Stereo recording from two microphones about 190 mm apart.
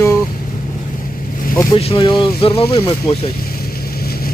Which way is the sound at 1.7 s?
30° left (ahead or behind).